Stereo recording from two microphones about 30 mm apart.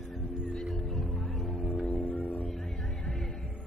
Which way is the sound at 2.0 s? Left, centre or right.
Left.